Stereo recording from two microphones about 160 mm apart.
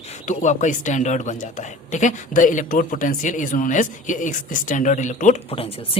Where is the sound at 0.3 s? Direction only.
50° left (ahead or behind).